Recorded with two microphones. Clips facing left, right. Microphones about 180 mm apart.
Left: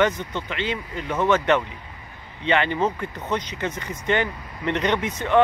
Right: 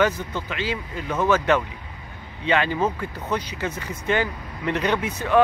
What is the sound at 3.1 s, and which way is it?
Speech, 10° right (ahead or behind).